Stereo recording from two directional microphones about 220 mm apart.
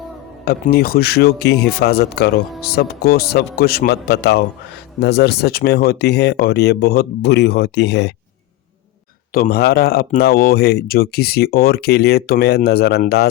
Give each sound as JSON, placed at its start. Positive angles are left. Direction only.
{"t": 0.4, "sound": "speech", "side_deg": 45}
{"t": 9.3, "sound": "speech", "side_deg": 40}